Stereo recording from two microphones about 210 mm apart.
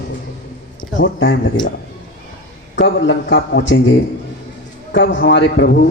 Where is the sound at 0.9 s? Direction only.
60° left (ahead or behind).